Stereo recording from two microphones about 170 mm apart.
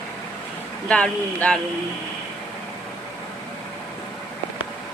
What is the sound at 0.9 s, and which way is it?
Speech, 5° left (ahead or behind).